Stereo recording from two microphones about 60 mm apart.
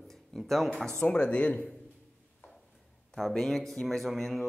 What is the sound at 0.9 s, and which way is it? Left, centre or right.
Speech, centre.